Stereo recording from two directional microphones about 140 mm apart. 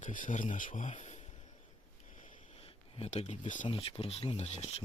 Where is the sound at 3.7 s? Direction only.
40° left (ahead or behind).